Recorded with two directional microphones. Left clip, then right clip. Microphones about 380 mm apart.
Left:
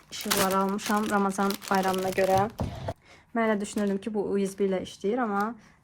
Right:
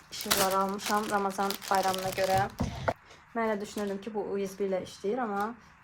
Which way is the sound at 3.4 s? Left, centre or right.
Left.